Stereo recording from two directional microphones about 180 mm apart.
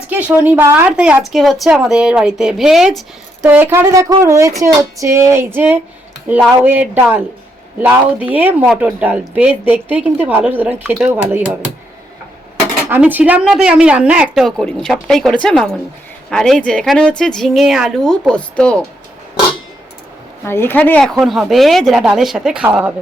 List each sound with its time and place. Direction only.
0.1 s a woman's voice: 10° right (ahead or behind)
12.9 s a woman's voice: 10° right (ahead or behind); by 18.8 s 5° left (ahead or behind)
20.4 s a woman's voice: 10° left (ahead or behind); by 23.0 s 5° right (ahead or behind)